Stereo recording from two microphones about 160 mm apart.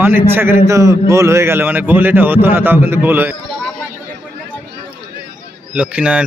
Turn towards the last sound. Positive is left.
turn(degrees=-5)  # may be behind; listen again after turning